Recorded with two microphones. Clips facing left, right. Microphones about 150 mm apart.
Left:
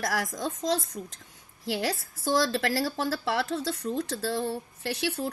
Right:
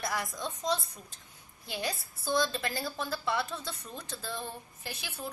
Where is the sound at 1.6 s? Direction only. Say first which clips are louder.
Left 7 dB; 90° left.